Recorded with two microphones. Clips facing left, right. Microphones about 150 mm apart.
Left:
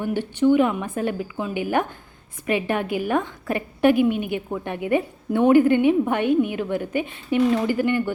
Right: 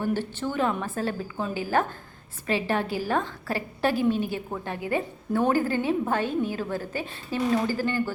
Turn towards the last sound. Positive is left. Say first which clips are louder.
# left 4 dB
turn(degrees=20)  # may be behind; listen again after turning